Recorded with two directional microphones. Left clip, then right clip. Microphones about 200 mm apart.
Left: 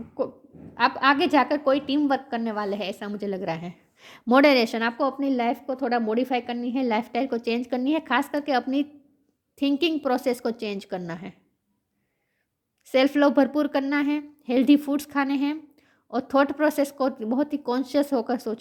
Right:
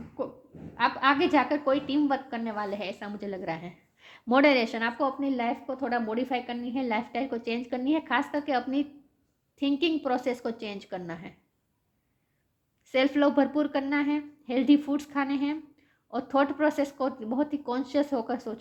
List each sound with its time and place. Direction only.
0.2 s a sound: 50° left (ahead or behind)
0.8 s a woman's voice: 50° left (ahead or behind)
12.8 s a woman's voice: 50° left (ahead or behind)